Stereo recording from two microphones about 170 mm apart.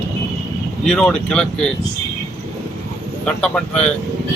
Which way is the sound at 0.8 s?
5° left (ahead or behind).